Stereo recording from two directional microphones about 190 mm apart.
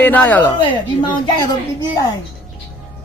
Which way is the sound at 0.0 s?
10° left (ahead or behind).